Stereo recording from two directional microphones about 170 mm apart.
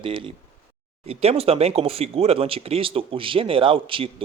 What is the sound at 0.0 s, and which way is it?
Speech, 30° right (ahead or behind).